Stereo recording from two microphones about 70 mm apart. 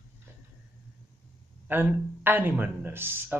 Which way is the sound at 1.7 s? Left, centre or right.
Right.